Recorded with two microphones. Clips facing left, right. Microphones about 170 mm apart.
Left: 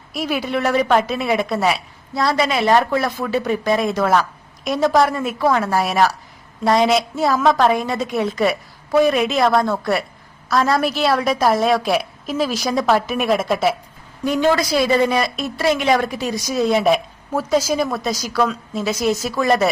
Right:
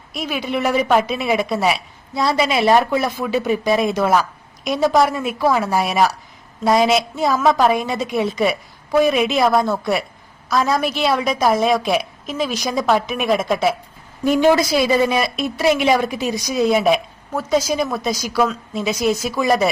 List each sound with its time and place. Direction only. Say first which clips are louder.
0.1 s a woman's voice: left 1 dB; 5° left (ahead or behind)
2.5 s a woman's voice: right 3 dB; 10° right (ahead or behind)
14.3 s a woman's voice: right 2 dB; 15° right (ahead or behind)
15.1 s a woman's voice: even; 5° right (ahead or behind)